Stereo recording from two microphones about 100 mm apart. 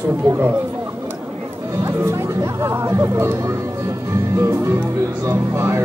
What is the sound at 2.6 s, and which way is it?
Speech, 25° right (ahead or behind).